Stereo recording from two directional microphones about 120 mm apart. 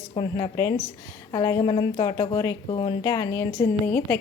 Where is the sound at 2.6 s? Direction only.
50° left (ahead or behind).